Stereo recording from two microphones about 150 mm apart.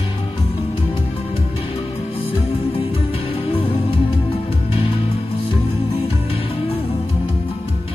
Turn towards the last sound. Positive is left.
turn(degrees=40)  # may be behind; listen again after turning